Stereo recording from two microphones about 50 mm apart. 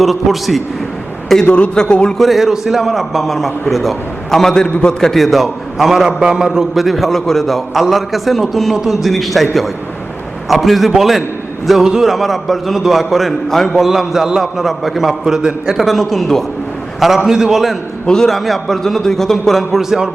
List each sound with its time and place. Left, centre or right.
0.0 s a man's voice: centre
1.5 s a man's voice: left
1.7 s a man's voice: centre
2.1 s a man's voice: centre
17.2 s a man's voice: centre
18.0 s a man's voice: centre
18.3 s a man's voice: centre